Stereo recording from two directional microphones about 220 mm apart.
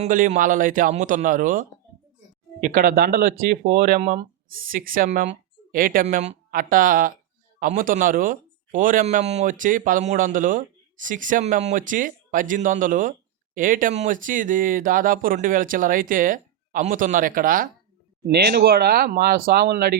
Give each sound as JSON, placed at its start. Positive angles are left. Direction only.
{"t": 0.0, "sound": "speech", "side_deg": -35}